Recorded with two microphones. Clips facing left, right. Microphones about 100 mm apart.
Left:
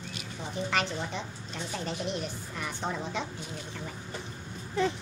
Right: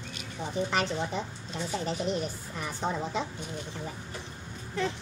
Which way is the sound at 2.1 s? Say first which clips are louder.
Right 3 dB; 5° right (ahead or behind).